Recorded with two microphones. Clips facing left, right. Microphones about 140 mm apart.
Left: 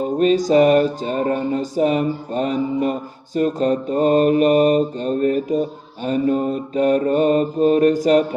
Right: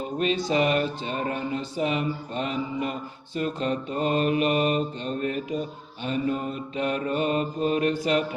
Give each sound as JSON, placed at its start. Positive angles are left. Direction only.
{"t": 0.0, "sound": "speech", "side_deg": 40}